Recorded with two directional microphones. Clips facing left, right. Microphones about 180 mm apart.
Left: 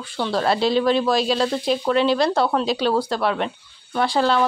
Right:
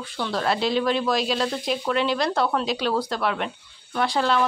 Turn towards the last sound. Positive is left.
turn(degrees=35)  # may be behind; listen again after turning